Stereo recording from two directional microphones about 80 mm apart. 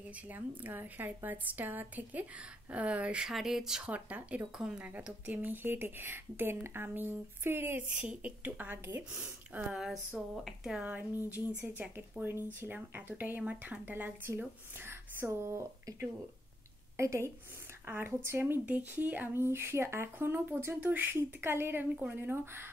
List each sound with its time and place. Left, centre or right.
0.3 s speech: right; by 3.9 s centre
3.9 s speech: centre
9.8 s speech: centre
10.8 s a woman's voice: centre